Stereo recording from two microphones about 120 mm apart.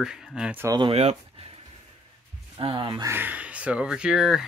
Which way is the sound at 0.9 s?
65° right (ahead or behind).